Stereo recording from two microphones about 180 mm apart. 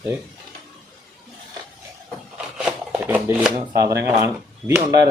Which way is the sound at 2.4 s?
5° right (ahead or behind).